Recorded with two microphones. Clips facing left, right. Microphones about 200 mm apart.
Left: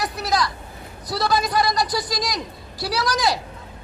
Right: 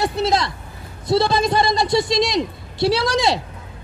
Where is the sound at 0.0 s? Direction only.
25° right (ahead or behind).